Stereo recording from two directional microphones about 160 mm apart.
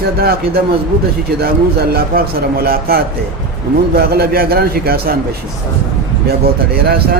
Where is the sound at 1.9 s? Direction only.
70° right (ahead or behind).